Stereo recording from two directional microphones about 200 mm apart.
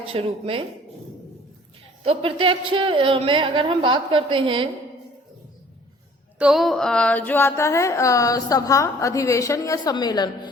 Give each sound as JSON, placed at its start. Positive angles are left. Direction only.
{"t": 0.0, "sound": "a woman's voice", "side_deg": -30}
{"t": 2.0, "sound": "a woman's voice", "side_deg": -25}
{"t": 6.4, "sound": "a sound", "side_deg": 0}